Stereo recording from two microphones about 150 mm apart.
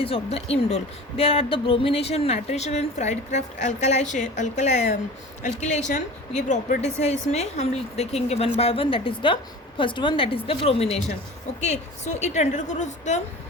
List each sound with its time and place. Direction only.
0.0 s a woman's voice: 40° left (ahead or behind)